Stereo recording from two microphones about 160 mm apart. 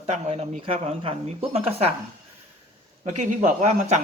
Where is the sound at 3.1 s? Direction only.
45° right (ahead or behind).